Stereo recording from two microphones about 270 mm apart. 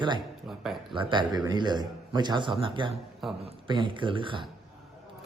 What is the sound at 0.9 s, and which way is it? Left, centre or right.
A man's voice, centre.